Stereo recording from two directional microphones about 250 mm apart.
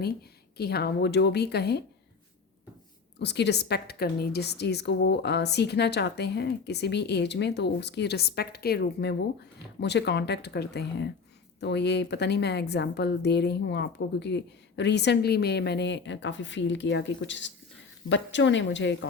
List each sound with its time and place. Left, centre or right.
0.0 s a woman's voice: left
3.2 s a woman's voice: left